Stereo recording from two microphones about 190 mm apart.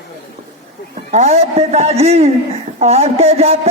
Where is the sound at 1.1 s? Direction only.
35° right (ahead or behind).